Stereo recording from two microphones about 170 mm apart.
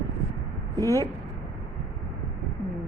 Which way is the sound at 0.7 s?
15° left (ahead or behind).